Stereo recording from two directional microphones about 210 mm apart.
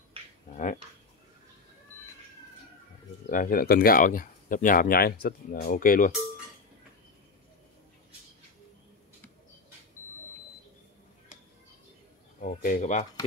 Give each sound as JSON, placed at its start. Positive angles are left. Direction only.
{"t": 0.5, "sound": "speech", "side_deg": 35}
{"t": 3.3, "sound": "speech", "side_deg": 40}
{"t": 12.4, "sound": "a sound", "side_deg": 40}